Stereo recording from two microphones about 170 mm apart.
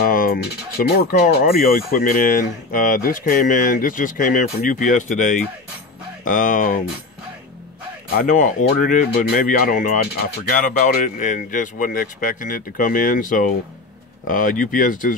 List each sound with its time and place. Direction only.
0.0 s speech: 55° left (ahead or behind)
8.1 s speech: 50° left (ahead or behind)